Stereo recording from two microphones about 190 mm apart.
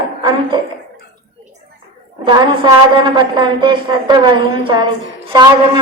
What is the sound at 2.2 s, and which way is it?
A woman's voice, 25° right (ahead or behind).